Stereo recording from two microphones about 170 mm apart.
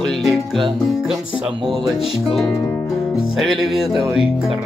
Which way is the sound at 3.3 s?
Centre (ahead or behind).